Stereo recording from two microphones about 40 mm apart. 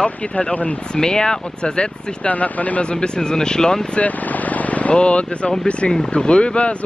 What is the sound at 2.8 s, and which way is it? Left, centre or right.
Speech, left.